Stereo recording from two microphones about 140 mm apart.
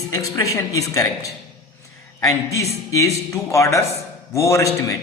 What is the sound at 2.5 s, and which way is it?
A man's voice, 20° left (ahead or behind).